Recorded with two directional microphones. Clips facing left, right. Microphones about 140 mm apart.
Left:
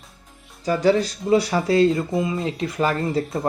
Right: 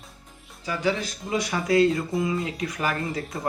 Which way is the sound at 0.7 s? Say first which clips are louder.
Left 8 dB; 40° left (ahead or behind).